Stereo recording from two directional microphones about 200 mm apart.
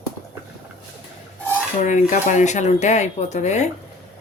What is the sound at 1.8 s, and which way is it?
Speech, 35° left (ahead or behind).